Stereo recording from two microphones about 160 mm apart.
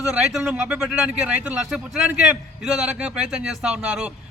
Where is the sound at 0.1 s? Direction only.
5° right (ahead or behind).